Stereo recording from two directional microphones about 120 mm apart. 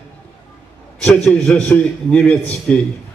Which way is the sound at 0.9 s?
5° left (ahead or behind).